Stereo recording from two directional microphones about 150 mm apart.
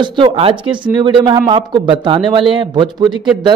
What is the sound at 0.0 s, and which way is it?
A man's voice, 35° right (ahead or behind).